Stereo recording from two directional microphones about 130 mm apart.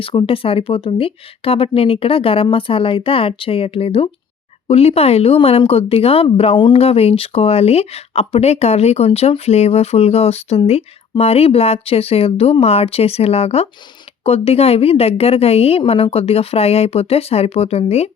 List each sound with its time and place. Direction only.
0.0 s speech: 45° left (ahead or behind)